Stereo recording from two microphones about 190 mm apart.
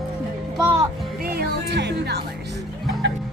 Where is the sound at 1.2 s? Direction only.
55° right (ahead or behind).